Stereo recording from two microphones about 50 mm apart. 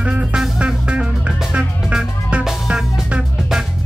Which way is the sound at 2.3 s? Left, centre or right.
Right.